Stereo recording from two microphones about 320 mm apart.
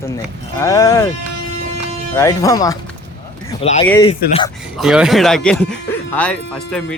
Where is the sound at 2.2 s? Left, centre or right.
Centre.